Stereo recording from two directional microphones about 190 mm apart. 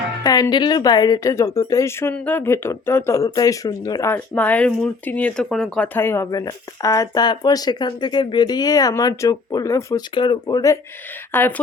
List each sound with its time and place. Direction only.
0.2 s a woman's voice: 20° left (ahead or behind)